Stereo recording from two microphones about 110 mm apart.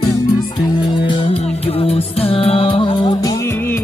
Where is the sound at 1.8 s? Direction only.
60° left (ahead or behind).